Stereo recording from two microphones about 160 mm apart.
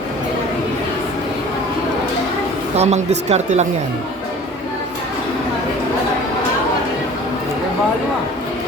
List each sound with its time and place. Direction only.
2.7 s speech: 45° right (ahead or behind)